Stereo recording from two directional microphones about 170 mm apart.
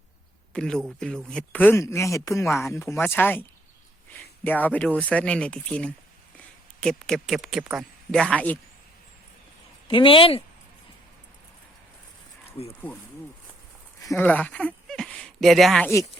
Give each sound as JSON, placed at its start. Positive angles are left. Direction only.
{"t": 0.5, "sound": "speech", "side_deg": 5}
{"t": 4.4, "sound": "speech", "side_deg": 10}
{"t": 9.9, "sound": "speech", "side_deg": 30}
{"t": 14.0, "sound": "speech", "side_deg": 15}